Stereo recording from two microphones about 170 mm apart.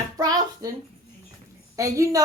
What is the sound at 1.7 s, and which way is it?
Speech, 20° right (ahead or behind).